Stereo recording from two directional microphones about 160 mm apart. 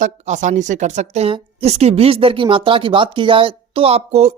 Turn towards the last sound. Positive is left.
turn(degrees=-40)  # may be behind; listen again after turning